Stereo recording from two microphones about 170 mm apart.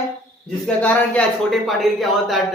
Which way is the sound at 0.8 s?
5° left (ahead or behind).